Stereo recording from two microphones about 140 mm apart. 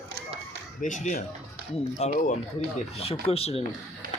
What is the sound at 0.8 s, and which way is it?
Speech, 65° left (ahead or behind).